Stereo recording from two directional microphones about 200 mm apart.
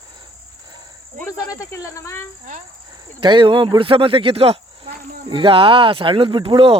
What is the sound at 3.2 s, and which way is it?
Speech, 25° right (ahead or behind).